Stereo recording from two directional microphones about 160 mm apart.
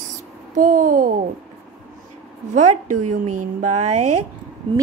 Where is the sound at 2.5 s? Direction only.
50° right (ahead or behind).